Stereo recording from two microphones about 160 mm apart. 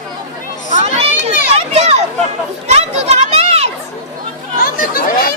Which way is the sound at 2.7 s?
45° right (ahead or behind).